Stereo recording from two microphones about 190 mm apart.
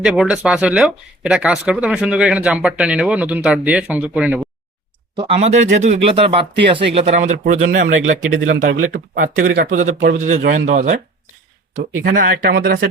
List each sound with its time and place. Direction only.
0.0 s speech: 5° right (ahead or behind)
5.1 s speech: 35° right (ahead or behind)
12.1 s speech: 50° right (ahead or behind)